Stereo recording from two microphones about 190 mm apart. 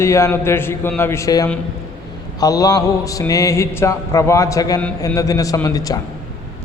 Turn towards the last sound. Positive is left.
turn(degrees=20)  # may be behind; listen again after turning